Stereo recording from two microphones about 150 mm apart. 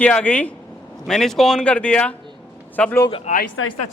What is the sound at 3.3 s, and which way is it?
Speech, 50° left (ahead or behind).